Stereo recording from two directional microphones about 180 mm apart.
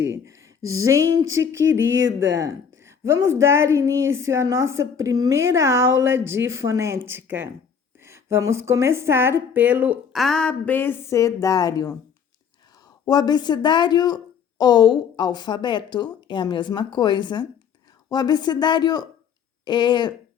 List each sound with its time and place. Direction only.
0.0 s speech: 15° right (ahead or behind)
1.8 s speech: 90° right
2.1 s speech: 15° right (ahead or behind); by 20.1 s 25° left (ahead or behind)